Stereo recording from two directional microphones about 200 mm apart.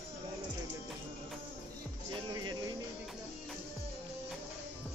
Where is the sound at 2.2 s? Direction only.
20° right (ahead or behind).